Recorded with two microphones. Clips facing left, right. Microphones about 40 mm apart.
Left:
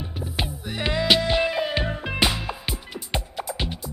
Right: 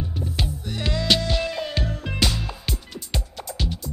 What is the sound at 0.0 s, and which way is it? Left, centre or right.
Music, centre.